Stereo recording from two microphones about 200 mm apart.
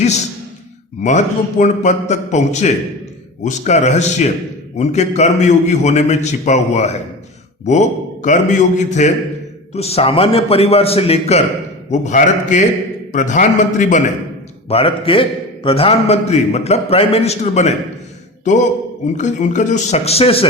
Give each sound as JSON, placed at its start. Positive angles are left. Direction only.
{"t": 1.0, "sound": "a man's voice", "side_deg": 35}
{"t": 19.0, "sound": "a man's voice", "side_deg": 35}